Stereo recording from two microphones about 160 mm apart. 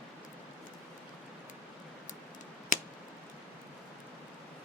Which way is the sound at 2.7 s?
55° left (ahead or behind).